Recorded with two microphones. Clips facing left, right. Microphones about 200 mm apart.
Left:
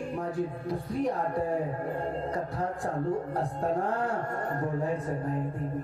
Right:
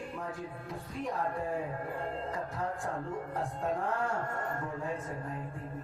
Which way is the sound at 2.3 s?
35° left (ahead or behind).